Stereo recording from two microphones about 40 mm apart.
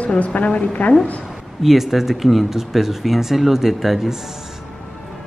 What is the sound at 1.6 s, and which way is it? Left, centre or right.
Speech, centre.